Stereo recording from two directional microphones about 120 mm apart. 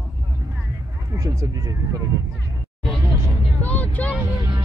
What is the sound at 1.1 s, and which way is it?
Speech, 30° right (ahead or behind).